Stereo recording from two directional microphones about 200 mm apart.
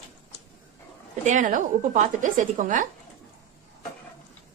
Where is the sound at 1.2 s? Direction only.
40° right (ahead or behind).